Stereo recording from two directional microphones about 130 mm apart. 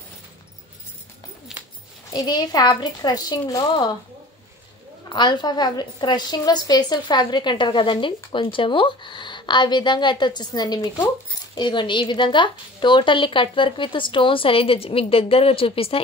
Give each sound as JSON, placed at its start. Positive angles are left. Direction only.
{"t": 2.1, "sound": "a woman's voice", "side_deg": 30}
{"t": 5.1, "sound": "a woman's voice", "side_deg": 35}